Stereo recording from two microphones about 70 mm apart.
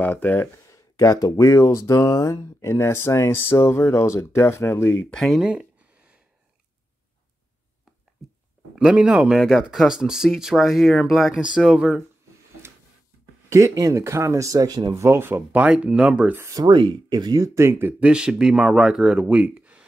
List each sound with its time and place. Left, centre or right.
0.0 s speech: left
0.7 s speech: left
4.9 s speech: centre
5.5 s a sound: centre
8.7 s speech: centre
13.5 s speech: right
15.0 s speech: right
15.5 s speech: centre
16.5 s speech: right
17.4 s speech: right
18.0 s speech: centre